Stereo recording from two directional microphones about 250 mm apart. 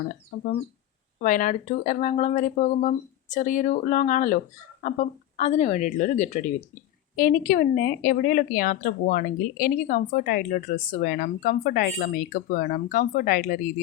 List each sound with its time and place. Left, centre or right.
0.3 s a woman's voice: left